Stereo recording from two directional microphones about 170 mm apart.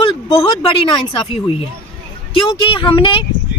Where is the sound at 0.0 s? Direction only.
30° left (ahead or behind).